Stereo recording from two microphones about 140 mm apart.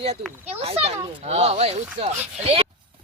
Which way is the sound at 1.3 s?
45° right (ahead or behind).